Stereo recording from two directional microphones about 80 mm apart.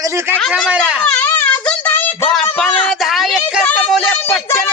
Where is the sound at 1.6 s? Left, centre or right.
Left.